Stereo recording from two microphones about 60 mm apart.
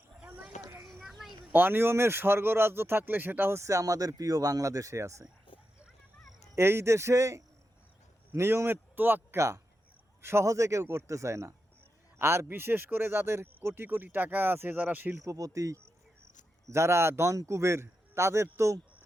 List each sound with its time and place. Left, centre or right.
0.9 s a sound: centre
1.5 s speech: right
3.6 s speech: right
6.6 s a man's voice: right
8.3 s a man's voice: right
10.4 s a man's voice: right
12.5 s speech: right
15.2 s speech: right
16.6 s a man's voice: right